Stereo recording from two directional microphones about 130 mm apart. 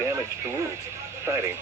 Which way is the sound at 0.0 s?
20° right (ahead or behind).